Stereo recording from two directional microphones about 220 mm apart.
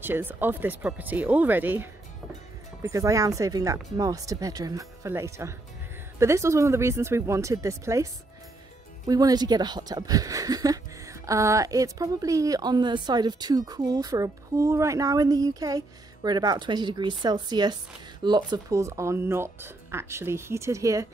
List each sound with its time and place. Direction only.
0.0 s speech: 10° right (ahead or behind)